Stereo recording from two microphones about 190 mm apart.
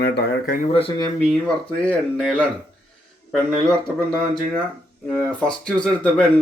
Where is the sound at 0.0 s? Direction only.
60° left (ahead or behind).